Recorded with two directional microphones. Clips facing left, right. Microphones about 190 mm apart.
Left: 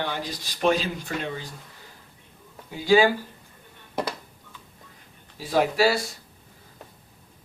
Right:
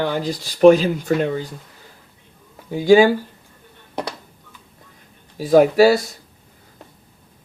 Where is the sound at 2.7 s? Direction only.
45° right (ahead or behind).